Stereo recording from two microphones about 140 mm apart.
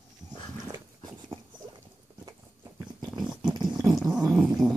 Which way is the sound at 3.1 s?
5° right (ahead or behind).